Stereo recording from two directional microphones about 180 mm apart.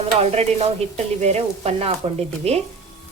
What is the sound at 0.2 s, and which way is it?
Sizzle, 35° right (ahead or behind).